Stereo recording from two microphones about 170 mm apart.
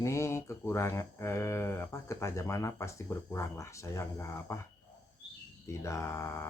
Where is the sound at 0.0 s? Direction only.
15° left (ahead or behind).